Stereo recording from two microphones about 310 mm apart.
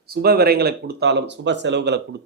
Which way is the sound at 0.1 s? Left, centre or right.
Right.